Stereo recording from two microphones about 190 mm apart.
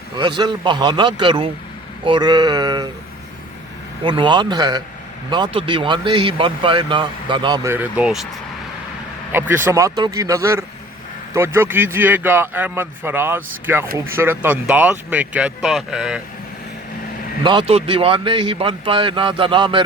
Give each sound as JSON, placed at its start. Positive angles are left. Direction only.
{"t": 0.2, "sound": "speech", "side_deg": -25}
{"t": 2.0, "sound": "a sound", "side_deg": -25}
{"t": 4.0, "sound": "speech", "side_deg": -25}
{"t": 9.7, "sound": "speech", "side_deg": -20}
{"t": 17.4, "sound": "speech", "side_deg": -25}